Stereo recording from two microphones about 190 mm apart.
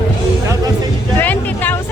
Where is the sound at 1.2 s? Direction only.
10° left (ahead or behind).